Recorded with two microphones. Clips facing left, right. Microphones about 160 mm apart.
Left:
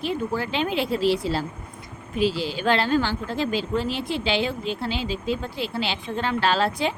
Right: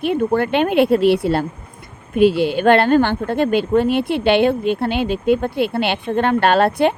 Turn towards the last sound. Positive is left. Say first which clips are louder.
# right 8 dB
turn(degrees=-60)  # may be behind; listen again after turning